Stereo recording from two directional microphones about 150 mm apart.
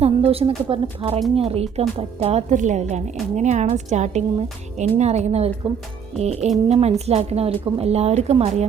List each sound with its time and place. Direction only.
0.0 s speech: 40° right (ahead or behind)